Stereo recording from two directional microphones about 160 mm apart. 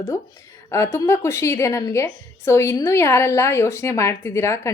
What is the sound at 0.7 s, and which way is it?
A woman's voice, 15° left (ahead or behind).